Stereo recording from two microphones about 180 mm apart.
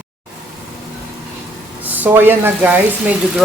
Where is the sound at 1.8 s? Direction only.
10° right (ahead or behind).